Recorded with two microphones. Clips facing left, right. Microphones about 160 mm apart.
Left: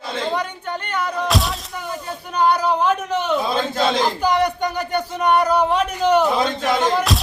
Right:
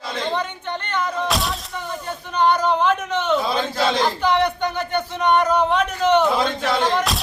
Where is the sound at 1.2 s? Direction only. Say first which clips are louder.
Left 2 dB; centre (ahead or behind); by 7.0 s 20° left (ahead or behind).